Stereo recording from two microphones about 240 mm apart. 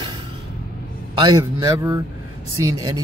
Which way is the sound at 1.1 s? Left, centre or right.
Centre.